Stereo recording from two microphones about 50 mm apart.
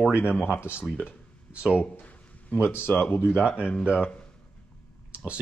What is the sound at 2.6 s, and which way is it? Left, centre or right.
Speech, left.